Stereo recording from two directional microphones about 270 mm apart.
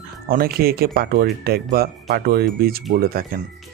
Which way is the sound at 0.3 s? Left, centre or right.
Right.